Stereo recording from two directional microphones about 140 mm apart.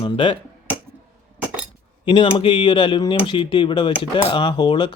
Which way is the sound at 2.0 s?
35° left (ahead or behind).